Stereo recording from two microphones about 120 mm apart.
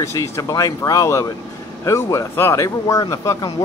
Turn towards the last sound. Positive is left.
turn(degrees=25)  # may be behind; listen again after turning